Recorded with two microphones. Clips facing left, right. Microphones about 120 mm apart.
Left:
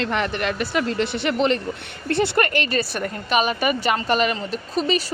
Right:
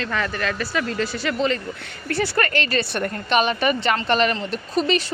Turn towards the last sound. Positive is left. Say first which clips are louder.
# right 1 dB
turn(degrees=5)  # may be behind; listen again after turning